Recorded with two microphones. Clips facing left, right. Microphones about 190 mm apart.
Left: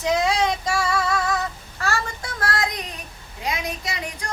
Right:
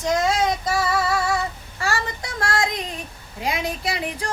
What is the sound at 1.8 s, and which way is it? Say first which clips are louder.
Child singing: right 1 dB; 15° right (ahead or behind).